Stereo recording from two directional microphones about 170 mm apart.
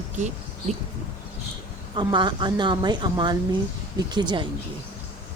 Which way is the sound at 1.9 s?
25° right (ahead or behind).